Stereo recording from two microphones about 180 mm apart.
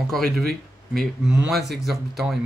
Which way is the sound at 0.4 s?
60° right (ahead or behind).